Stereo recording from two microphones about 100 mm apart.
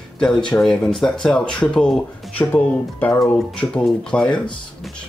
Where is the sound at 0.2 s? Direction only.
10° left (ahead or behind).